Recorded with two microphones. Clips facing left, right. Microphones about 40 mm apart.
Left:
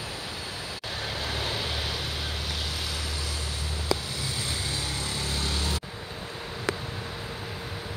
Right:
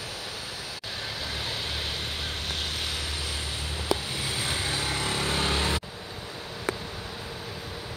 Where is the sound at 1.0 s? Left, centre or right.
Centre.